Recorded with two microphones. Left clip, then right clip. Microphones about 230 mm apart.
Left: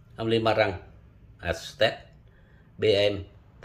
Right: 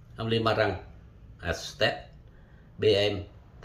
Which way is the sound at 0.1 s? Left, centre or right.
Centre.